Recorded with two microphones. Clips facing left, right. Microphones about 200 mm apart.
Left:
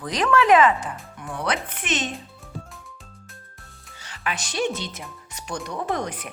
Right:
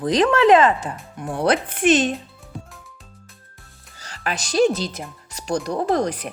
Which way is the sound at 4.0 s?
40° right (ahead or behind).